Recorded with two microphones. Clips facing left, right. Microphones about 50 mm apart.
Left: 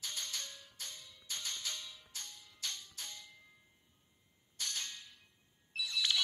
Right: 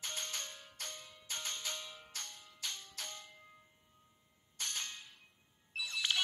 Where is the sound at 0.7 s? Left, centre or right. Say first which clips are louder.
Right 2 dB; right.